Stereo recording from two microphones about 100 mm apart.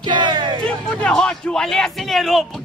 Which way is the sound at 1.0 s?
5° left (ahead or behind).